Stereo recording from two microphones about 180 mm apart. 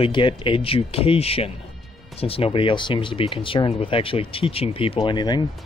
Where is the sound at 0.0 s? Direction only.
30° left (ahead or behind).